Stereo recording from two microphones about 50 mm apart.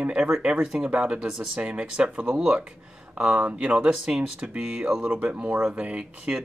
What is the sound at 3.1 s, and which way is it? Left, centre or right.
Speech, centre.